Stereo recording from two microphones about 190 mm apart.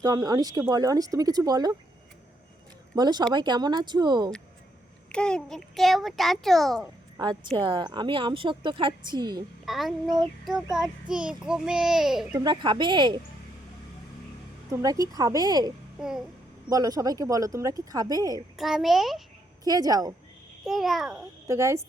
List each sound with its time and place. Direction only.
0.0 s a woman's voice: 20° right (ahead or behind)
2.9 s a woman's voice: 20° right (ahead or behind)
5.1 s a child's voice: 5° left (ahead or behind)
7.2 s a woman's voice: 25° right (ahead or behind)
9.6 s a child's voice: centre (ahead or behind)
12.4 s a woman's voice: 20° right (ahead or behind)
14.7 s a woman's voice: 15° right (ahead or behind)
16.0 s a sound: 5° right (ahead or behind)
16.6 s a woman's voice: 20° right (ahead or behind)
18.5 s a child's voice: centre (ahead or behind)
19.6 s a woman's voice: 20° right (ahead or behind)
20.7 s a child's voice: centre (ahead or behind)
21.1 s speech: 15° right (ahead or behind)